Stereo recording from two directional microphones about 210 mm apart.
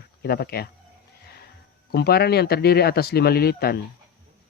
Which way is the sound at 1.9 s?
50° left (ahead or behind).